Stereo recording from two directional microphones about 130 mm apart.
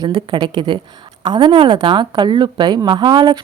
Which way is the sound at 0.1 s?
40° right (ahead or behind).